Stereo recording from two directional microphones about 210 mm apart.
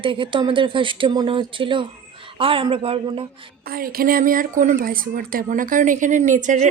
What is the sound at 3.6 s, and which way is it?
Speech, 45° right (ahead or behind).